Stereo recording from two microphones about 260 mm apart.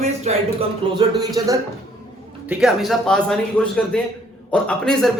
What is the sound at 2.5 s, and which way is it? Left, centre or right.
Speech, centre.